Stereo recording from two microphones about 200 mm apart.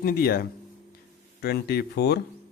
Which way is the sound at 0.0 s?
50° left (ahead or behind).